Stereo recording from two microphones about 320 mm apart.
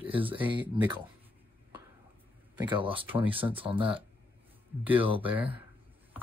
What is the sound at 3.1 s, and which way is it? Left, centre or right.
Speech, centre.